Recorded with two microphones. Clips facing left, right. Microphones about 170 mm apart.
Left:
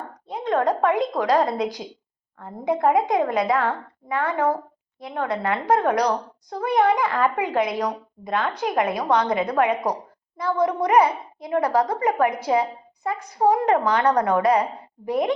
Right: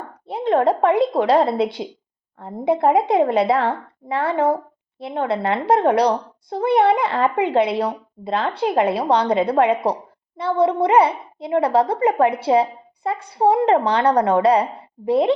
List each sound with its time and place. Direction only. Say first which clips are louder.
0.3 s a woman's voice: right 4 dB; 30° right (ahead or behind)